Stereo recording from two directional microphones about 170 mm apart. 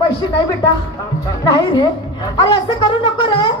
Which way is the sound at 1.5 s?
25° left (ahead or behind).